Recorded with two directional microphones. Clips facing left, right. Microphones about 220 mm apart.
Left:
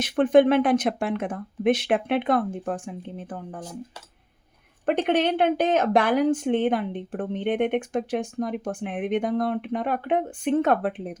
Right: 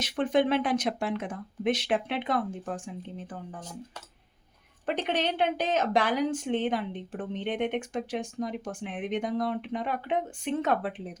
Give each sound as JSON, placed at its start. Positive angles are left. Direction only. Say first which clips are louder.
{"t": 0.0, "sound": "a woman's voice", "louder": "left 8 dB", "side_deg": 55}
{"t": 4.9, "sound": "a woman's voice", "louder": "left 7 dB", "side_deg": 55}